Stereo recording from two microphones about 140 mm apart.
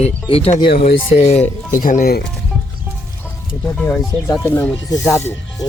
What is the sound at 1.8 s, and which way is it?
Speech, 75° left (ahead or behind).